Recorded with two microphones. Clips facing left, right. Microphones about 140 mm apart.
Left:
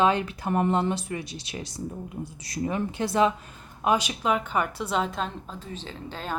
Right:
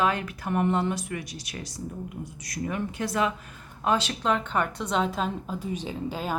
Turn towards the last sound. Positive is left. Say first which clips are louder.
# right 4 dB
turn(degrees=-10)  # may be behind; listen again after turning